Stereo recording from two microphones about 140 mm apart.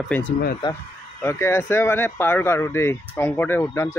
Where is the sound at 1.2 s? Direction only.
20° left (ahead or behind).